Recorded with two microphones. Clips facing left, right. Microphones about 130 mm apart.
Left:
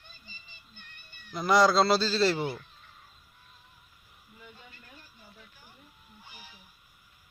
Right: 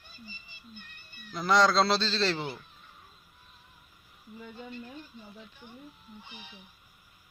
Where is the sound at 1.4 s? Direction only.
10° left (ahead or behind).